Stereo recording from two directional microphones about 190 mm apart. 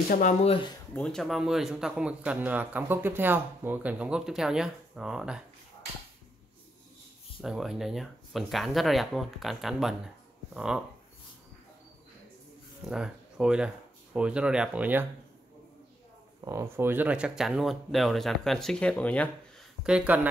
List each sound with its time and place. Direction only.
0.1 s speech: 40° left (ahead or behind)
0.9 s speech: 5° left (ahead or behind)
7.4 s speech: centre (ahead or behind)
12.9 s speech: 5° right (ahead or behind)
16.4 s speech: 15° right (ahead or behind); by 19.2 s 5° left (ahead or behind)
19.8 s speech: 5° right (ahead or behind)